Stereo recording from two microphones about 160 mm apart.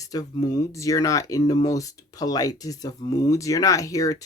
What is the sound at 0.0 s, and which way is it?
Speech, 25° left (ahead or behind).